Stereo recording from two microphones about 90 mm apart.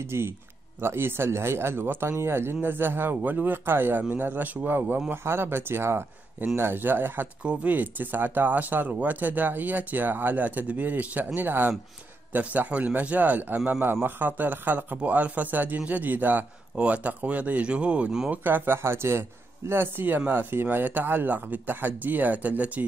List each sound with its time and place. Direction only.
0.1 s a man's voice: 30° right (ahead or behind); by 18.4 s 10° right (ahead or behind)
18.4 s speech: 25° right (ahead or behind)